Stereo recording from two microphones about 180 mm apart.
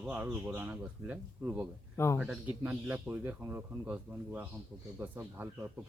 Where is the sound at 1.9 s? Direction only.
15° left (ahead or behind).